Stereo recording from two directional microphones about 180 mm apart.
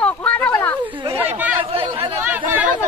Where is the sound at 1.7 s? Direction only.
30° right (ahead or behind).